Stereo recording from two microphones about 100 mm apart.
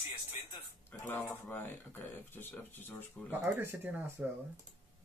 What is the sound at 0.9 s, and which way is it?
Speech, 20° left (ahead or behind).